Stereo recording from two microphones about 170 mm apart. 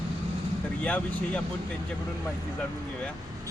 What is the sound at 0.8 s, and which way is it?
Speech, 10° left (ahead or behind).